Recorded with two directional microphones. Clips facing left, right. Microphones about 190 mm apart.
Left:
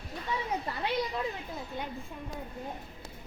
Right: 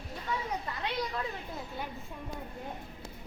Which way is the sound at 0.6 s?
30° left (ahead or behind).